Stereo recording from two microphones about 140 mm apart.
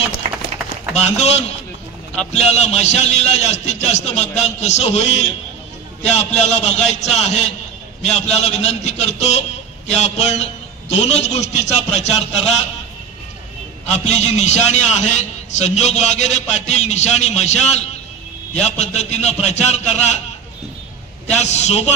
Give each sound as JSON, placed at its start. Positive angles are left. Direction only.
{"t": 0.2, "sound": "run", "side_deg": -50}
{"t": 1.0, "sound": "a man's voice", "side_deg": 50}
{"t": 13.9, "sound": "a man's voice", "side_deg": 55}
{"t": 21.4, "sound": "a man's voice", "side_deg": 55}